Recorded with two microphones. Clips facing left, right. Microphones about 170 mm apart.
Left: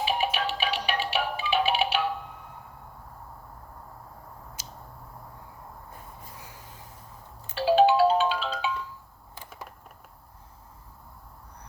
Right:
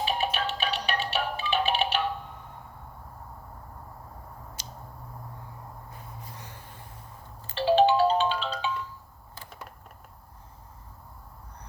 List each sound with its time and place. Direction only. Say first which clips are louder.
0.0 s music: left 1 dB; 10° left (ahead or behind)
4.6 s a sound: right 1 dB; 5° left (ahead or behind)
6.3 s snort: right 1 dB; 5° left (ahead or behind)
7.4 s music: left 1 dB; 10° left (ahead or behind)